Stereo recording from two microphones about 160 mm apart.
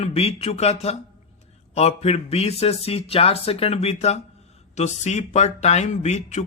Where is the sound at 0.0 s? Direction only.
40° left (ahead or behind).